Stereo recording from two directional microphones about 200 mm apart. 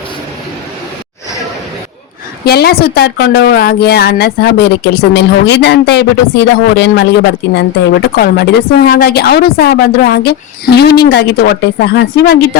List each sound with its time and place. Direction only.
2.4 s a woman's voice: 55° left (ahead or behind)